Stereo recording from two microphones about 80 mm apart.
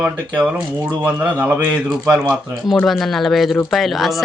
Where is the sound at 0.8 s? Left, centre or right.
Right.